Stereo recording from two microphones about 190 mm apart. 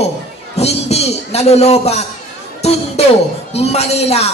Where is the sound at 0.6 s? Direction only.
35° left (ahead or behind).